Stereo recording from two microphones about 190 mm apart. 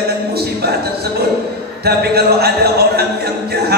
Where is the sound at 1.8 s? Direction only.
55° right (ahead or behind).